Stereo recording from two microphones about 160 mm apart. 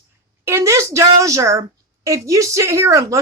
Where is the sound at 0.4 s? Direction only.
15° right (ahead or behind).